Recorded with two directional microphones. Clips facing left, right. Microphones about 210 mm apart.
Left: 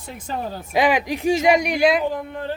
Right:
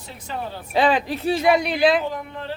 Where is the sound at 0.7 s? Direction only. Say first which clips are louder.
Even; 10° left (ahead or behind).